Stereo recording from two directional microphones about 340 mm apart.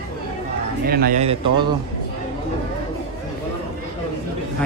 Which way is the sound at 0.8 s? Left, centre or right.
Right.